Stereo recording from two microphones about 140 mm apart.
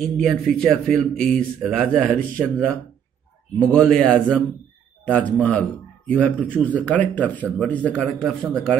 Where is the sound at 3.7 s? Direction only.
5° left (ahead or behind).